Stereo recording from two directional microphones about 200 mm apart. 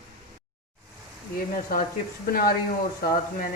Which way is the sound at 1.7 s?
45° left (ahead or behind).